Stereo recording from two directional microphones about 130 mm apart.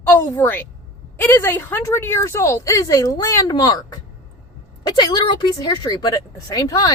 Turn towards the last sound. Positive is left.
turn(degrees=25)  # may be behind; listen again after turning